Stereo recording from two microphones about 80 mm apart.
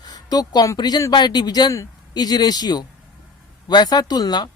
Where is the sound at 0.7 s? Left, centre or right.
Left.